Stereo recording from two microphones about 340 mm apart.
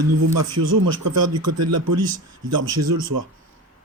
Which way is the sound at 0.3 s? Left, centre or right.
Right.